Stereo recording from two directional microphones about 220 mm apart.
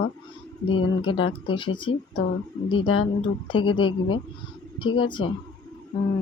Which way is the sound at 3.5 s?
25° left (ahead or behind).